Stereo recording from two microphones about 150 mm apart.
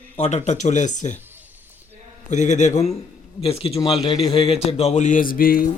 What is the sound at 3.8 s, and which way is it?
Speech, 25° left (ahead or behind).